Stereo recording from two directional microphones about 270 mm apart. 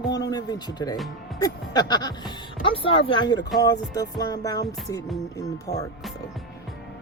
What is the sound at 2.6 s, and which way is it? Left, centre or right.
Speech, centre.